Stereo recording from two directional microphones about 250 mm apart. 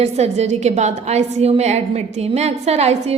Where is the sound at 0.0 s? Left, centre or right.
Right.